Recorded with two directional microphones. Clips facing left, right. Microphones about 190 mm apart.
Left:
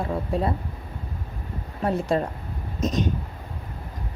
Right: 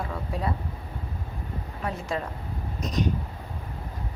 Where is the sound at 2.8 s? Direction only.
20° left (ahead or behind).